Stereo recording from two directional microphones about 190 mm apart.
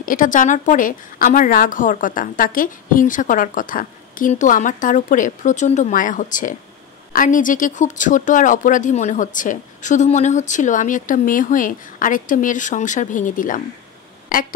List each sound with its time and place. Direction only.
0.0 s speech: 45° left (ahead or behind)